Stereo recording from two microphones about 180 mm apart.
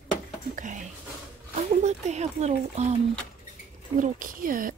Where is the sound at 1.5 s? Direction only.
40° right (ahead or behind).